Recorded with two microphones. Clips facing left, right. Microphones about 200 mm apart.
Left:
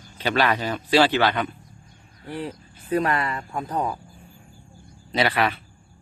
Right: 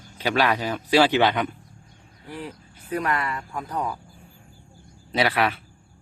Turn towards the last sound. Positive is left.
turn(degrees=-5)  # may be behind; listen again after turning